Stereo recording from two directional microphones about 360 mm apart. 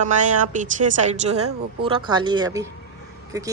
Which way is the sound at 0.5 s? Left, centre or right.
Right.